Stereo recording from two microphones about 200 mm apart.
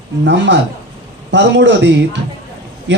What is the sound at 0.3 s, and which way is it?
A man's voice, 60° right (ahead or behind).